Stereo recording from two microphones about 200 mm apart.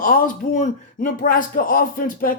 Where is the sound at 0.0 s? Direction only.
45° left (ahead or behind).